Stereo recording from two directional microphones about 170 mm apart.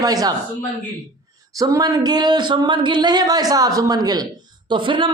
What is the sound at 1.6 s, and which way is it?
Speech, 20° right (ahead or behind).